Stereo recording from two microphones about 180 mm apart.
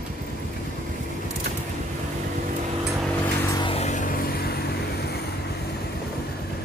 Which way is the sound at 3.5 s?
25° left (ahead or behind).